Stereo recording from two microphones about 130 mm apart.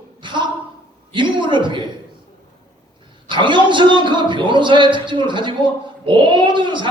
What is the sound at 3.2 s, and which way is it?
A man's voice, 35° right (ahead or behind).